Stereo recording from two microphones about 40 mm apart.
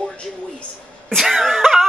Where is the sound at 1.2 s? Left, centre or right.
Centre.